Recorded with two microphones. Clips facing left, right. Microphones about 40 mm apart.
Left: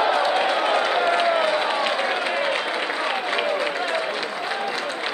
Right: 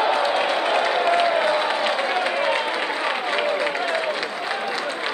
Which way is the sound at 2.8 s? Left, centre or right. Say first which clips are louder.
Right 1 dB; right.